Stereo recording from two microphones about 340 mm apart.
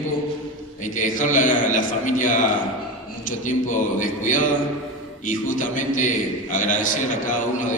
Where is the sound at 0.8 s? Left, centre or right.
Left.